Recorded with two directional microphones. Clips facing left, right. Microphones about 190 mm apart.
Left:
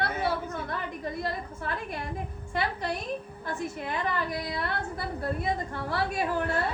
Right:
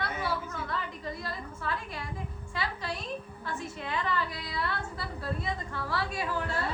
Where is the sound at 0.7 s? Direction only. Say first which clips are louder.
Left 3 dB; 55° left (ahead or behind).